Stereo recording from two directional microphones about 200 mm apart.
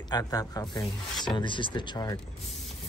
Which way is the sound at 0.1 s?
20° left (ahead or behind).